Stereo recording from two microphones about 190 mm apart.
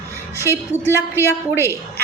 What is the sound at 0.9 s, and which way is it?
Speech, 15° left (ahead or behind).